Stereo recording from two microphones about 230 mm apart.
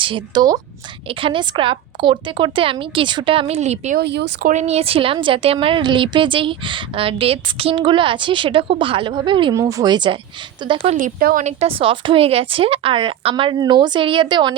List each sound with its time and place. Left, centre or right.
0.0 s a woman's voice: centre
4.0 s speech: right
4.5 s a woman's voice: right
10.9 s a woman's voice: right; by 14.5 s centre